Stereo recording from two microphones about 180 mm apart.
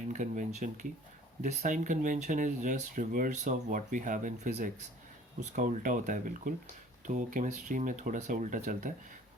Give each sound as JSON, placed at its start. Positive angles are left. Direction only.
{"t": 0.1, "sound": "speech", "side_deg": -45}